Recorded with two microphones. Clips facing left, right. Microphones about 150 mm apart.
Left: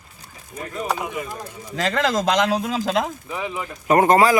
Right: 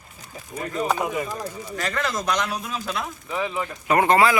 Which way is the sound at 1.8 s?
90° left.